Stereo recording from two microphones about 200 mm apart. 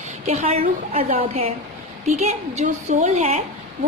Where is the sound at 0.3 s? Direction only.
30° right (ahead or behind).